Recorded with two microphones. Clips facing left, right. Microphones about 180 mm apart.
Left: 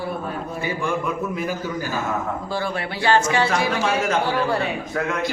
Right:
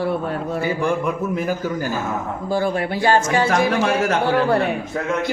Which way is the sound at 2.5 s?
45° right (ahead or behind).